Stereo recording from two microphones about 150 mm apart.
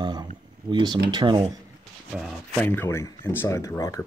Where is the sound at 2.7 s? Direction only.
15° left (ahead or behind).